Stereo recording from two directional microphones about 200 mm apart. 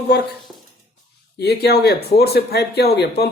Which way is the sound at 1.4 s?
55° left (ahead or behind).